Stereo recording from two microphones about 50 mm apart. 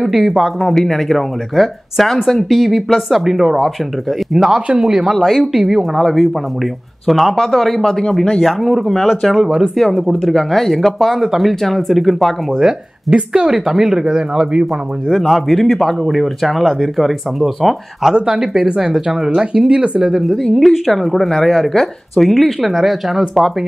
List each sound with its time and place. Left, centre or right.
0.0 s speech: centre
0.6 s speech: centre
7.8 s speech: centre
8.5 s speech: centre
9.8 s speech: centre
12.6 s speech: centre
15.0 s speech: centre
18.1 s speech: centre
20.2 s speech: centre